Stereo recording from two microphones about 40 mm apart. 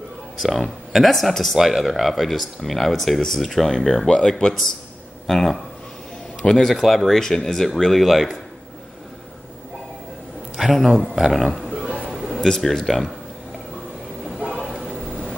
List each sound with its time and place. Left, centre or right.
0.4 s speech: centre
7.2 s speech: centre
10.5 s a man's voice: centre
11.7 s a sound: right
12.1 s a sound: centre
12.4 s speech: centre